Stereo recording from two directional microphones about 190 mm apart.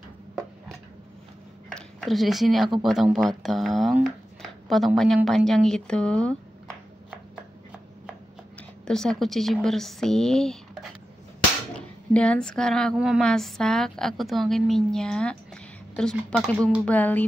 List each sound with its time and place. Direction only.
1.7 s speech: centre (ahead or behind)
8.8 s speech: 5° left (ahead or behind)
16.8 s music: 10° left (ahead or behind)